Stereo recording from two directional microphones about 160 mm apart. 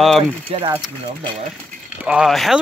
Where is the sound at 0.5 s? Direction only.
35° right (ahead or behind).